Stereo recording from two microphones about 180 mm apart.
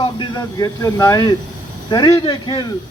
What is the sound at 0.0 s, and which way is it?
A man's voice, 25° left (ahead or behind).